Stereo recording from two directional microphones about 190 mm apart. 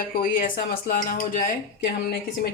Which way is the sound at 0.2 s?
45° left (ahead or behind).